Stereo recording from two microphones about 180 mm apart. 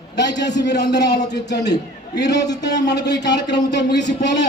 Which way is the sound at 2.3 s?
20° left (ahead or behind).